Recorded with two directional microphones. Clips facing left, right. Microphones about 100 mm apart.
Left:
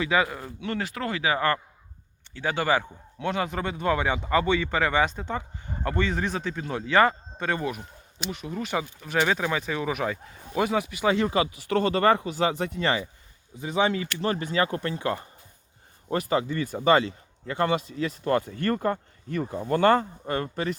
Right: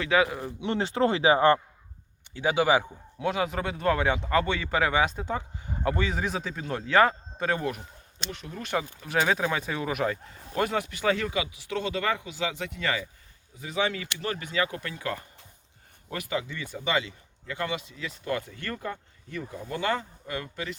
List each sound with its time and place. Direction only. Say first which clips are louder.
0.0 s speech: even; centre (ahead or behind)
0.3 s speech: right 2 dB; 15° right (ahead or behind)
2.3 s speech: right 2 dB; 10° right (ahead or behind); by 11.0 s 5° left (ahead or behind)
11.0 s speech: left 3 dB; 20° left (ahead or behind)
11.3 s speech: left 6 dB; 45° left (ahead or behind)